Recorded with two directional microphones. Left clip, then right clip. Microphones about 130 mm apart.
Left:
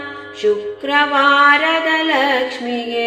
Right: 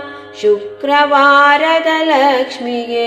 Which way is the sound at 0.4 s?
55° right (ahead or behind).